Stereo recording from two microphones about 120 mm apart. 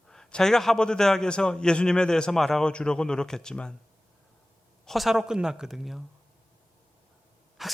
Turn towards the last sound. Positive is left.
turn(degrees=0)  # may be behind; listen again after turning